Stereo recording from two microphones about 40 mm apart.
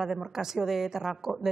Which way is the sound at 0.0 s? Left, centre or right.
Centre.